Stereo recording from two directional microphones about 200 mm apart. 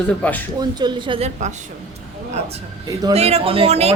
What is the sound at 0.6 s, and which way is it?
Speech, 20° right (ahead or behind).